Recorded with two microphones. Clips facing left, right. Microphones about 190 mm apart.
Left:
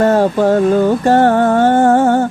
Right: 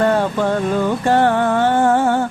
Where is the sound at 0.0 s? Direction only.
40° left (ahead or behind).